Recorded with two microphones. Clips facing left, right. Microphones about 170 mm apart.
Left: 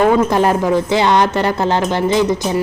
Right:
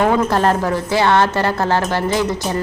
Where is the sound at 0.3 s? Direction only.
15° left (ahead or behind).